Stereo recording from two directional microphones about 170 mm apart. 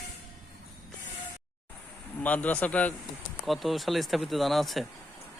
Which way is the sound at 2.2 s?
10° left (ahead or behind).